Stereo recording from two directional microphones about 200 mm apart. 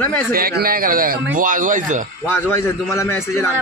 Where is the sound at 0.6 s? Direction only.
45° right (ahead or behind).